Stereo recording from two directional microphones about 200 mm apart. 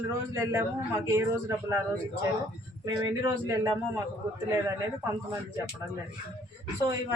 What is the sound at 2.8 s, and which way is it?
Speech, 20° right (ahead or behind).